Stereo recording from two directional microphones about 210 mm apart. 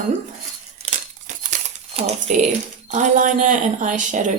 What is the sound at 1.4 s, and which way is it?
Crumpling, 35° right (ahead or behind).